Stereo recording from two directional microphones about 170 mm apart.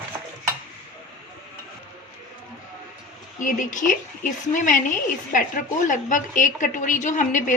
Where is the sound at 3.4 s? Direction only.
50° left (ahead or behind).